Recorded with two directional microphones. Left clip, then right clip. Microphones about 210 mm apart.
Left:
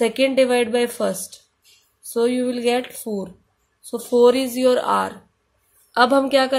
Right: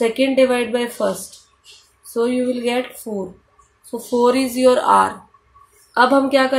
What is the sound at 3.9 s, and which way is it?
A woman's voice, 35° left (ahead or behind).